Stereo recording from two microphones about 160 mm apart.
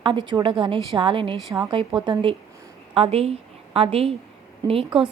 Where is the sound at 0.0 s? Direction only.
30° right (ahead or behind).